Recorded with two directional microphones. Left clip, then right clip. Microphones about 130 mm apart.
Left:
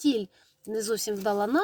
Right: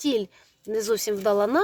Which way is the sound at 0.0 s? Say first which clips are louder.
Right 2 dB; 25° right (ahead or behind).